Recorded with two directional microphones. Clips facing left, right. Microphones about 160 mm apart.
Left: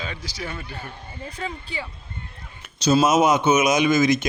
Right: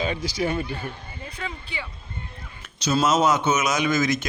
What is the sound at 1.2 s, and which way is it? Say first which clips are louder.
Speech: left 3 dB; 40° left (ahead or behind).